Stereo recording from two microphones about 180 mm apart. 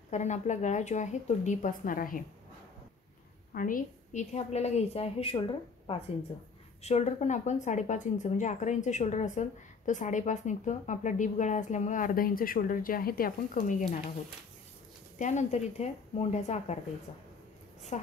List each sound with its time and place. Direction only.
0.1 s speech: 40° left (ahead or behind)
3.5 s a woman's voice: 50° left (ahead or behind); by 5.4 s 35° left (ahead or behind)
6.8 s speech: 35° left (ahead or behind)
15.1 s a woman's voice: 40° left (ahead or behind)
17.9 s a woman's voice: 35° left (ahead or behind)